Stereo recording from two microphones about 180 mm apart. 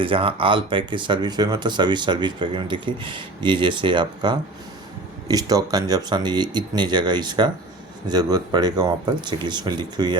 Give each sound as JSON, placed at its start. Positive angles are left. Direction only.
{"t": 0.0, "sound": "speech", "side_deg": -30}